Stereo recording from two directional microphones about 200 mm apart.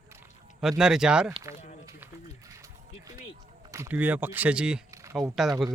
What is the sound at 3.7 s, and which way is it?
Speech, 10° right (ahead or behind).